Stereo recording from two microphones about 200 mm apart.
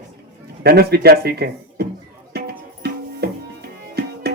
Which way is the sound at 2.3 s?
50° right (ahead or behind).